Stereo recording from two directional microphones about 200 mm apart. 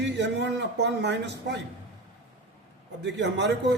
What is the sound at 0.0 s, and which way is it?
Speech, 60° right (ahead or behind).